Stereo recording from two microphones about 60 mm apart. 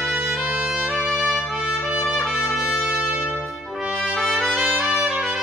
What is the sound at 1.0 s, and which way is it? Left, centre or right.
Music, centre.